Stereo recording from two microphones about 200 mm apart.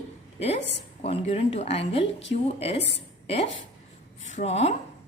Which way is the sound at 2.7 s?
60° left (ahead or behind).